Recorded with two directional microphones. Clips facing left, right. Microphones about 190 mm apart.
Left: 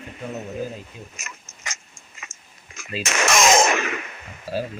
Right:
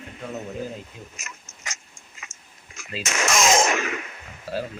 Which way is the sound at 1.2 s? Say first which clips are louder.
Left 2 dB; 70° left (ahead or behind).